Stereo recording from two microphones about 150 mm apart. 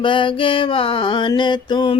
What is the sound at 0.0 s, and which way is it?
Mantra, 35° left (ahead or behind).